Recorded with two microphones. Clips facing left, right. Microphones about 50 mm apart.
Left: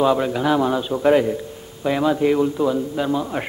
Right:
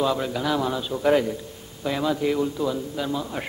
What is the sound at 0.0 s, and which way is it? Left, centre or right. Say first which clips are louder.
A man's voice: left 6 dB; left.